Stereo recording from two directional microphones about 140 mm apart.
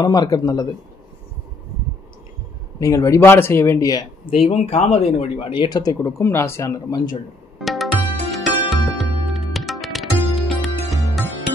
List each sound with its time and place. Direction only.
0.0 s speech: 30° left (ahead or behind)
2.8 s speech: 20° left (ahead or behind)
4.4 s speech: 45° left (ahead or behind); by 7.2 s 25° left (ahead or behind)
7.5 s music: centre (ahead or behind)